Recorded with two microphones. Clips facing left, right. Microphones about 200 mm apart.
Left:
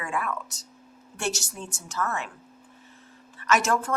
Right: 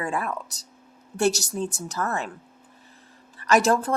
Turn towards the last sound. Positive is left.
turn(degrees=-35)  # may be behind; listen again after turning